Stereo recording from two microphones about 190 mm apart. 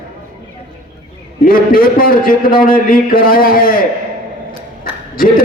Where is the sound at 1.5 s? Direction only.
50° left (ahead or behind).